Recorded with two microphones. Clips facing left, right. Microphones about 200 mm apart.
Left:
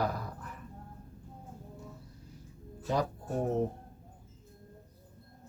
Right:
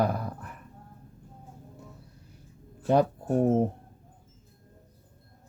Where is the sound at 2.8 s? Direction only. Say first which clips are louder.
Right 9 dB; 60° right (ahead or behind).